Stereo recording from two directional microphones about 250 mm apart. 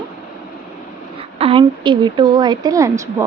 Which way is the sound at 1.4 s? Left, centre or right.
Right.